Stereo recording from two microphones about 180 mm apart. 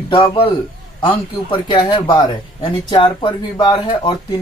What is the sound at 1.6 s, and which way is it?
Speech, 25° left (ahead or behind).